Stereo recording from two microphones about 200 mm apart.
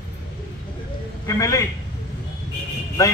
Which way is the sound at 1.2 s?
15° left (ahead or behind).